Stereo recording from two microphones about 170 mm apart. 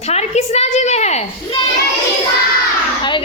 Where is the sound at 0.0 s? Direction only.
40° left (ahead or behind).